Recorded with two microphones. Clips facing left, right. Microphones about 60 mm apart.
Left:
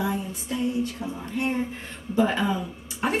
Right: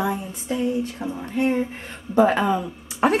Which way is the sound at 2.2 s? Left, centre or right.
Right.